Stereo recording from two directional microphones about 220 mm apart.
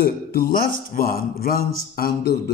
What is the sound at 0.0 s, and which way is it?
A man's voice, 45° left (ahead or behind).